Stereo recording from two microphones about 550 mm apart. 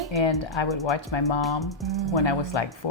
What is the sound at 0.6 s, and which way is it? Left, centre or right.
Speech, left.